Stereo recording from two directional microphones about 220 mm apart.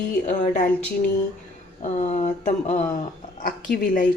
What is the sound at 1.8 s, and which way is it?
Speech, 30° left (ahead or behind).